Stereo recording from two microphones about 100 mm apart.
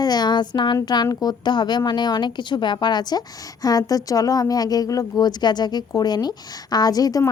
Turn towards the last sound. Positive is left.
turn(degrees=40)  # may be behind; listen again after turning